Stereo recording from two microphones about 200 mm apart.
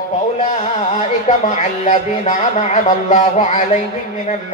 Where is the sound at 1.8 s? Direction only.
35° left (ahead or behind).